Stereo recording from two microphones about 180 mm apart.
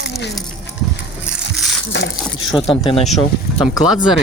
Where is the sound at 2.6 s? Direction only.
30° left (ahead or behind).